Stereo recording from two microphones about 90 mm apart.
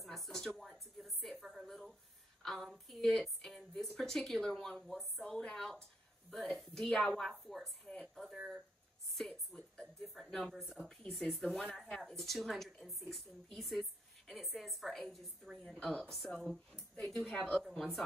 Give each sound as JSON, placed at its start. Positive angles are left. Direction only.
{"t": 0.0, "sound": "a sound", "side_deg": 0}
{"t": 2.4, "sound": "a woman's voice", "side_deg": 5}
{"t": 8.4, "sound": "speech", "side_deg": -5}
{"t": 9.1, "sound": "music", "side_deg": 5}
{"t": 10.3, "sound": "speech", "side_deg": 0}
{"t": 15.8, "sound": "a woman's voice", "side_deg": 15}
{"t": 16.1, "sound": "speech", "side_deg": 0}